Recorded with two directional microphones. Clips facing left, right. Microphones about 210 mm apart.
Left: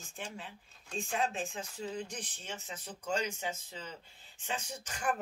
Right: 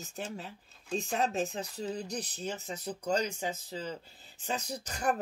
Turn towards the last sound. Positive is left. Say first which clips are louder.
# right 4 dB
turn(degrees=-40)  # may be behind; listen again after turning